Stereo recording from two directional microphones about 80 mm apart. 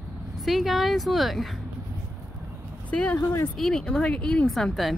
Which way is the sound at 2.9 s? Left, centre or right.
Centre.